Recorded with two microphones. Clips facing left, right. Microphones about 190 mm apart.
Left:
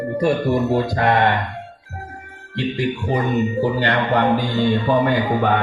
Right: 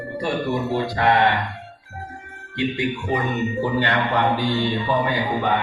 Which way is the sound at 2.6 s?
35° left (ahead or behind).